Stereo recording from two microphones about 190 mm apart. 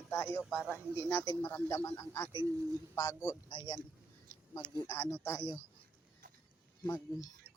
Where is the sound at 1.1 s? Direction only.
10° left (ahead or behind).